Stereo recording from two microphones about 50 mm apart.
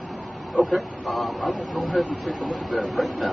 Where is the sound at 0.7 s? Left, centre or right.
Centre.